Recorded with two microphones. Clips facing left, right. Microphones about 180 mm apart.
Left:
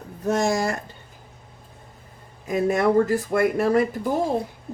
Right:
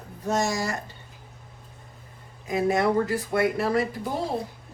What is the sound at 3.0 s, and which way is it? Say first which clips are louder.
Speech: left 3 dB; 45° left (ahead or behind).